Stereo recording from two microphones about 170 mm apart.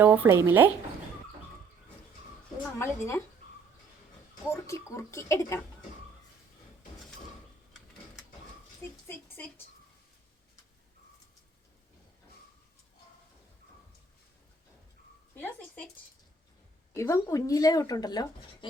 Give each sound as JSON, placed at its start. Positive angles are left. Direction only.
{"t": 0.0, "sound": "speech", "side_deg": -10}
{"t": 2.7, "sound": "speech", "side_deg": 15}
{"t": 4.5, "sound": "speech", "side_deg": 15}
{"t": 8.8, "sound": "speech", "side_deg": 15}
{"t": 15.4, "sound": "a sound", "side_deg": 10}
{"t": 16.9, "sound": "speech", "side_deg": 20}